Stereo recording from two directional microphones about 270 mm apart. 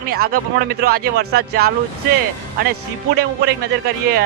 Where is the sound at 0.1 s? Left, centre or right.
Right.